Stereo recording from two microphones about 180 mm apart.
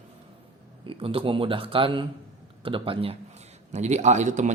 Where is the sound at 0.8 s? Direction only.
30° right (ahead or behind).